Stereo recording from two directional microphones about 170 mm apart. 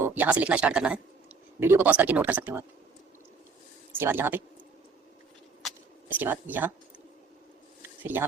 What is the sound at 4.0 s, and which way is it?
Speech, 15° right (ahead or behind).